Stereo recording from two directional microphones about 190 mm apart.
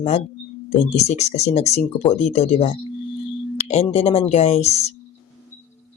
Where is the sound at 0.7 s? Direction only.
35° left (ahead or behind).